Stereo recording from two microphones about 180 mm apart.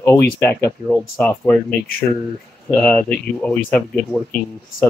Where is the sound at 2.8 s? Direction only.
5° left (ahead or behind).